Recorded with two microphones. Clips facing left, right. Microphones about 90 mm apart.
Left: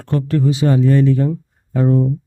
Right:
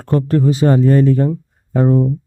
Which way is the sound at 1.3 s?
35° right (ahead or behind).